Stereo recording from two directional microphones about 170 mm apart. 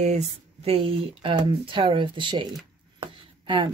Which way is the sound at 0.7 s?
35° right (ahead or behind).